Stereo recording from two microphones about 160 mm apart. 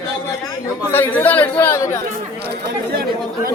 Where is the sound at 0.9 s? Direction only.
15° left (ahead or behind).